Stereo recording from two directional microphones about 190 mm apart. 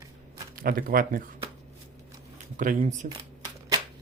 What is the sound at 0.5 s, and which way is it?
Speech, 45° right (ahead or behind).